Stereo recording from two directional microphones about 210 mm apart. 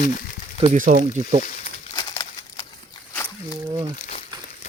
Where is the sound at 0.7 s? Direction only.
35° right (ahead or behind).